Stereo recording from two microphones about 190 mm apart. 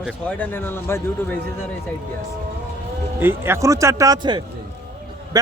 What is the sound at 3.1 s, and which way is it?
Speech, 10° right (ahead or behind).